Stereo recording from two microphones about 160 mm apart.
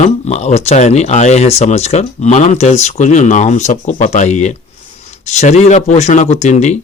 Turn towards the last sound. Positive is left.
turn(degrees=45)  # may be behind; listen again after turning